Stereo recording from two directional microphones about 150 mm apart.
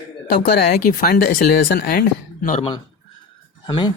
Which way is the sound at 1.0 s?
80° left.